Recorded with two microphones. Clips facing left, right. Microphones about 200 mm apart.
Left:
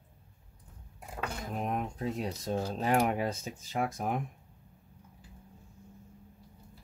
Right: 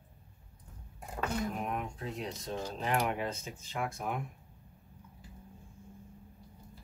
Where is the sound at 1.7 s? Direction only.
40° left (ahead or behind).